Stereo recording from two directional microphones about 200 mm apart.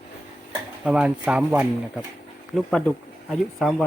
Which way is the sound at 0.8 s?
5° right (ahead or behind).